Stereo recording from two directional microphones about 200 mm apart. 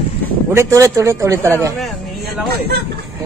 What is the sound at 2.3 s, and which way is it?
Speech, 50° right (ahead or behind).